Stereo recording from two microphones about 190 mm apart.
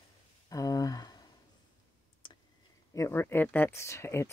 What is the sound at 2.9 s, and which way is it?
Speech, 15° left (ahead or behind).